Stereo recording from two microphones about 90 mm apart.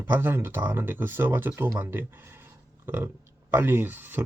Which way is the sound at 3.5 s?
25° right (ahead or behind).